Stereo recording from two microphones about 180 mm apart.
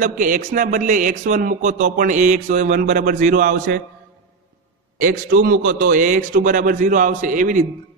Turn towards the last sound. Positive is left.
turn(degrees=-45)  # may be behind; listen again after turning